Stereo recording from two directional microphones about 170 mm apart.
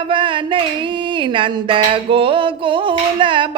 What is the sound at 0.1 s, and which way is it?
Music, 30° right (ahead or behind).